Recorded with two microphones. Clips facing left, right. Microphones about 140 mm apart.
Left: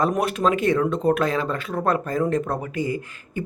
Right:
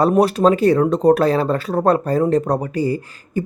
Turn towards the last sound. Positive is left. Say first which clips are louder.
# right 6 dB
turn(degrees=-35)  # may be behind; listen again after turning